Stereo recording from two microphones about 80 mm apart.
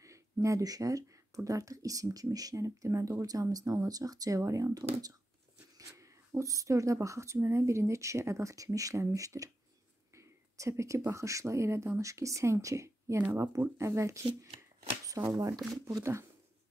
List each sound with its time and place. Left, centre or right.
0.0 s speech: right
5.8 s speech: right
15.0 s speech: right
16.0 s speech: right